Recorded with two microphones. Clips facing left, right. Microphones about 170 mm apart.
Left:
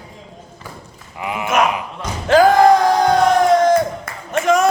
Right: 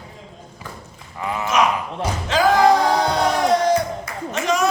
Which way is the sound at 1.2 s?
15° left (ahead or behind).